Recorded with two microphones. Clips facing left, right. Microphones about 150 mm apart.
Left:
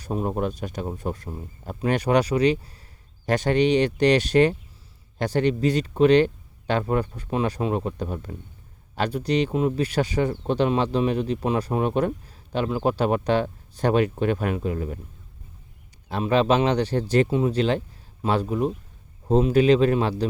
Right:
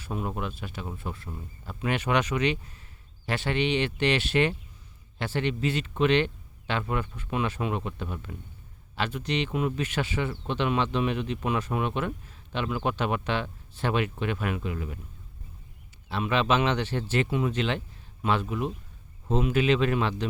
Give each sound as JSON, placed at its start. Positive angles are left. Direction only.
{"t": 0.0, "sound": "a man's voice", "side_deg": 40}
{"t": 16.0, "sound": "a man's voice", "side_deg": 40}